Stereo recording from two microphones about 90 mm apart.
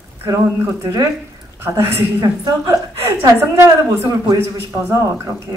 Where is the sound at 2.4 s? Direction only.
40° right (ahead or behind).